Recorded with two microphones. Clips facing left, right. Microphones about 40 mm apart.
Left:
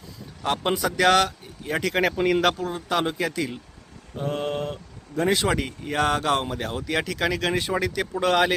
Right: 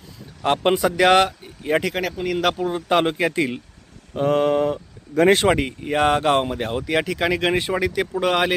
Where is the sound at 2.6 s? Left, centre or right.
Right.